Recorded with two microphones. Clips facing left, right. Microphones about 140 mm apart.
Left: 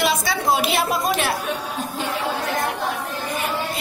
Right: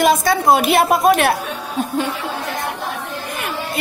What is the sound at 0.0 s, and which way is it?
A woman's voice, 50° right (ahead or behind).